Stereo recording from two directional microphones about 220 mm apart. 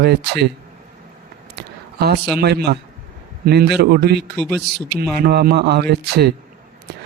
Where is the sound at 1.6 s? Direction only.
50° right (ahead or behind).